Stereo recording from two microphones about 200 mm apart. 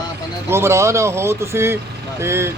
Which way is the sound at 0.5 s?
15° right (ahead or behind).